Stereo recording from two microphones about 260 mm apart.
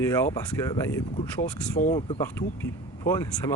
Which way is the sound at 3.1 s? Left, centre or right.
Centre.